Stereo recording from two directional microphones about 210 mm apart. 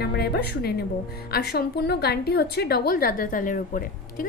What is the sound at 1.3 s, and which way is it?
A woman's voice, 50° left (ahead or behind).